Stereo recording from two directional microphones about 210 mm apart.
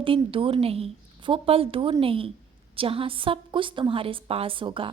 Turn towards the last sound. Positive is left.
turn(degrees=-25)  # may be behind; listen again after turning